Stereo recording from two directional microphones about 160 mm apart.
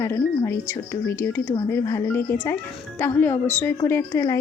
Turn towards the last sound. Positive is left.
turn(degrees=20)  # may be behind; listen again after turning